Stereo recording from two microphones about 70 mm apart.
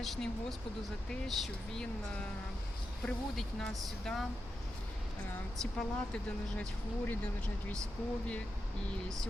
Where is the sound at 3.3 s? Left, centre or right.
Centre.